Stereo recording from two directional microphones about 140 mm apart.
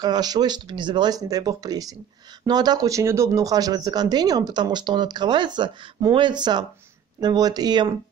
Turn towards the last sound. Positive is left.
turn(degrees=-30)  # may be behind; listen again after turning